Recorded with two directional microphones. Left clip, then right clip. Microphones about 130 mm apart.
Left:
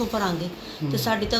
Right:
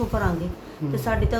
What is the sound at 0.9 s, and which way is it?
Speech, 20° right (ahead or behind).